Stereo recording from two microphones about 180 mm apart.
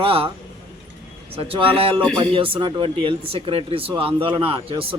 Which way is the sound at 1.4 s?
30° right (ahead or behind).